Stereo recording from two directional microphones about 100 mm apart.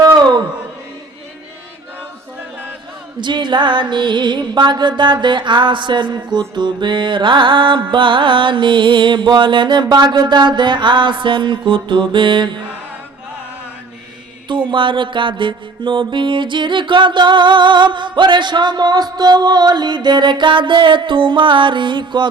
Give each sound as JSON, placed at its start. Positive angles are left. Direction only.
{"t": 0.0, "sound": "chant", "side_deg": -45}
{"t": 3.2, "sound": "music", "side_deg": -50}
{"t": 14.4, "sound": "music", "side_deg": -55}